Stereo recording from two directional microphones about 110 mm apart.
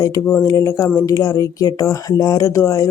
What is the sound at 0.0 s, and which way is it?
Speech, 30° left (ahead or behind).